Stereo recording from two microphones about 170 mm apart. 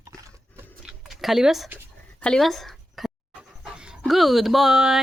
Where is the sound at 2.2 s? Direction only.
5° left (ahead or behind).